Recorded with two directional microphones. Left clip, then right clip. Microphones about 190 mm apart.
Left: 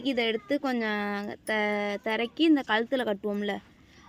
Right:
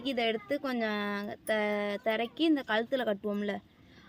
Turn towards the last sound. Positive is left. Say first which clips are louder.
# left 3 dB
turn(degrees=25)  # may be behind; listen again after turning